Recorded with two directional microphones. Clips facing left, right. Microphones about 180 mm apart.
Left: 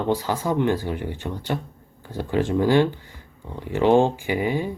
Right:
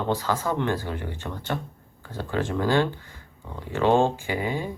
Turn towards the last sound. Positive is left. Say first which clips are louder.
# left 4 dB
turn(degrees=15)  # may be behind; listen again after turning